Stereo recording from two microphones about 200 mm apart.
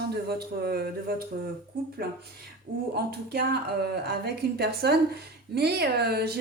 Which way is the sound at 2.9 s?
55° right (ahead or behind).